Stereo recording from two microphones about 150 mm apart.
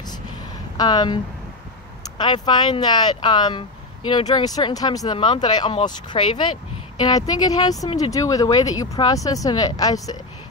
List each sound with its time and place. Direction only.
0.7 s speech: 30° left (ahead or behind)